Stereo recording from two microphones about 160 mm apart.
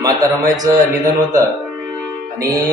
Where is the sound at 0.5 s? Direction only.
25° right (ahead or behind).